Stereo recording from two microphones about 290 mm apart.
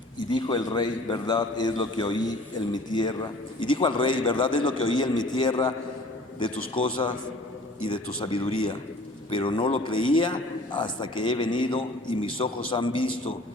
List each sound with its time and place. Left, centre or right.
0.2 s a man's voice: centre
8.2 s a man's voice: centre